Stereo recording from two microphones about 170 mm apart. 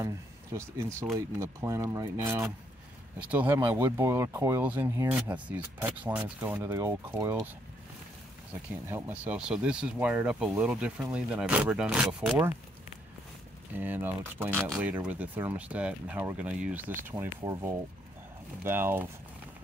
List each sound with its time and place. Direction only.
0.0 s speech: 15° right (ahead or behind)
8.8 s speech: 10° right (ahead or behind)
13.7 s speech: 10° right (ahead or behind)